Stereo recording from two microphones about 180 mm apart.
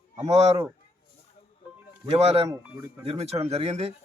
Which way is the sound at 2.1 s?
35° right (ahead or behind).